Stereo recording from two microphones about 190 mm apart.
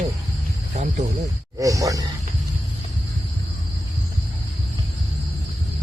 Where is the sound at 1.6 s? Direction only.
15° right (ahead or behind).